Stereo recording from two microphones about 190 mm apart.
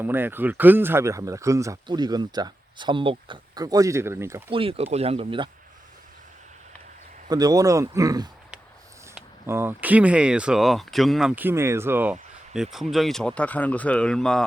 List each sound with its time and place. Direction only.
0.0 s speech: 10° right (ahead or behind)
4.5 s speech: 30° right (ahead or behind)
7.3 s a man's voice: 20° right (ahead or behind); by 14.4 s 5° left (ahead or behind)